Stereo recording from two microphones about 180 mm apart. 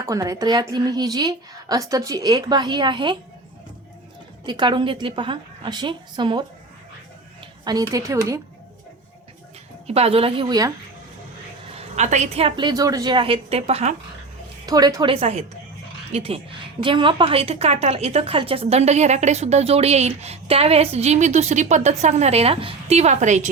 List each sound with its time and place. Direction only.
0.0 s a woman's voice: 20° right (ahead or behind)
4.4 s a woman's voice: 25° right (ahead or behind)
7.6 s a woman's voice: 20° right (ahead or behind)
9.8 s a woman's voice: 35° right (ahead or behind)
11.9 s a woman's voice: 40° right (ahead or behind)
14.7 s a woman's voice: 20° right (ahead or behind)
15.1 s a woman's voice: 35° right (ahead or behind)